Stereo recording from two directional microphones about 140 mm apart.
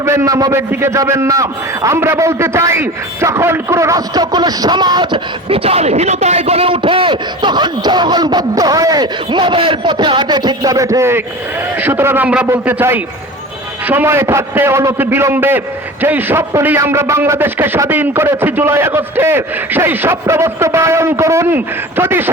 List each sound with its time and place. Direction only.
0.0 s a man's voice: 20° right (ahead or behind)